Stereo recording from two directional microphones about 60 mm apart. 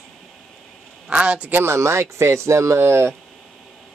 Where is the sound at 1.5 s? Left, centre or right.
Right.